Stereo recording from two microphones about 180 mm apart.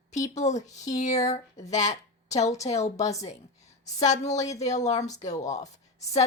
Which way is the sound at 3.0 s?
20° left (ahead or behind).